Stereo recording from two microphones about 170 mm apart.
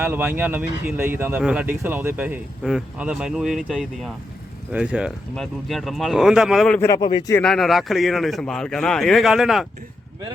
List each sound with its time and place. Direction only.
0.0 s a man's voice: 10° right (ahead or behind)
6.7 s speech: 15° left (ahead or behind)
7.3 s a man's voice: 5° left (ahead or behind)